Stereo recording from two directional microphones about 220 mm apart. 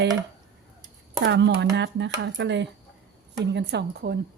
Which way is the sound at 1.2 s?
50° right (ahead or behind).